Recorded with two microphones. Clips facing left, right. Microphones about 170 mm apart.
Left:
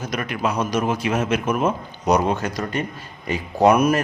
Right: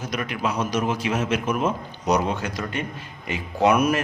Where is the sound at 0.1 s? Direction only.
50° left (ahead or behind).